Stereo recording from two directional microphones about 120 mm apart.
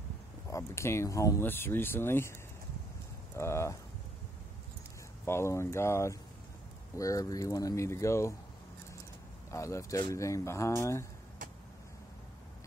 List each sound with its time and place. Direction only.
0.5 s speech: 25° left (ahead or behind)
3.3 s speech: 25° left (ahead or behind)
5.2 s speech: 20° left (ahead or behind)
9.5 s speech: 25° left (ahead or behind)